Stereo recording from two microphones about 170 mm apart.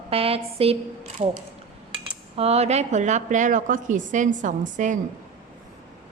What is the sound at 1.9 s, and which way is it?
A woman's voice, 35° right (ahead or behind).